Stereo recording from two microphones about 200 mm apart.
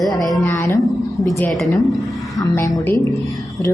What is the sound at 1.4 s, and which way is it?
A woman's voice, 5° left (ahead or behind).